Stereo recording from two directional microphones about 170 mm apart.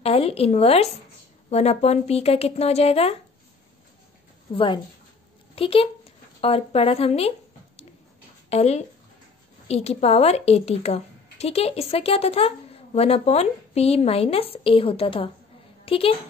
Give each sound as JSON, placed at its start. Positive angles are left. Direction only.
{"t": 0.0, "sound": "a woman's voice", "side_deg": 35}
{"t": 5.6, "sound": "a woman's voice", "side_deg": 35}